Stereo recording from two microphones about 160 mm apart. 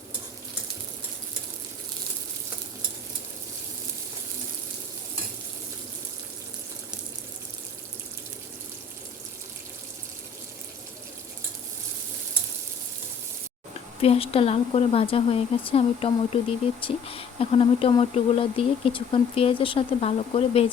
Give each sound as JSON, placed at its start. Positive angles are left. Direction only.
{"t": 14.0, "sound": "speech", "side_deg": 35}